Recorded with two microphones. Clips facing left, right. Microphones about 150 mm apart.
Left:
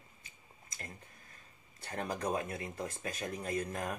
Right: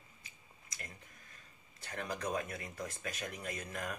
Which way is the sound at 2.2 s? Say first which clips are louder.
Left 2 dB; 30° left (ahead or behind).